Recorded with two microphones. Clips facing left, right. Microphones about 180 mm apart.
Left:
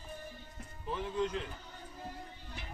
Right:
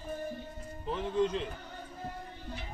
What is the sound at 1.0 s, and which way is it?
Speech, 25° right (ahead or behind).